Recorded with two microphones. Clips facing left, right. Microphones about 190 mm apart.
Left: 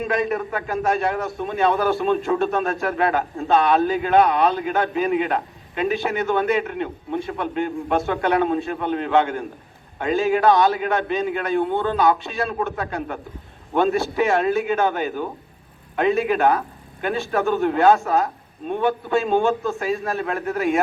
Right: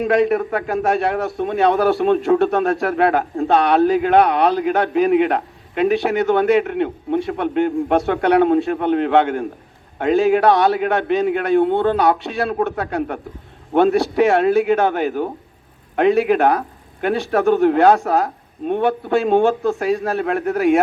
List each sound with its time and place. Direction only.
0.5 s a man's voice: 70° right (ahead or behind)
14.2 s a man's voice: 65° right (ahead or behind)